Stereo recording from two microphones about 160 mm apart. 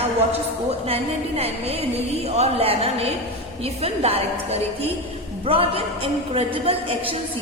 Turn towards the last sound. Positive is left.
turn(degrees=-35)  # may be behind; listen again after turning